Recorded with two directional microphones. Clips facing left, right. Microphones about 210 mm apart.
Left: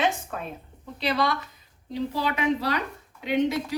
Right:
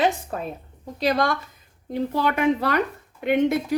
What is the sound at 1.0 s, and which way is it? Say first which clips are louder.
A woman's voice: right 4 dB; 45° right (ahead or behind).